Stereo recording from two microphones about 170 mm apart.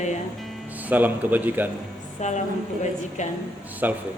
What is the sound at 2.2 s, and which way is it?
Speech, 45° left (ahead or behind).